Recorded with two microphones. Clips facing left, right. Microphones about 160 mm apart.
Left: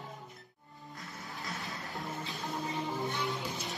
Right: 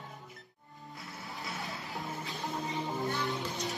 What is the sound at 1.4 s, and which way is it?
Music, centre (ahead or behind).